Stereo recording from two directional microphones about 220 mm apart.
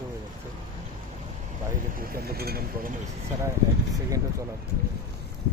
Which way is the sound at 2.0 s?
45° right (ahead or behind).